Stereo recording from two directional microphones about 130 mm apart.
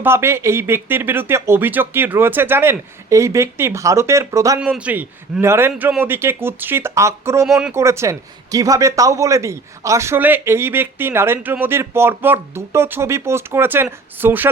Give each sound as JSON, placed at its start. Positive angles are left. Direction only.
{"t": 0.0, "sound": "speech", "side_deg": -20}
{"t": 4.6, "sound": "speech", "side_deg": -10}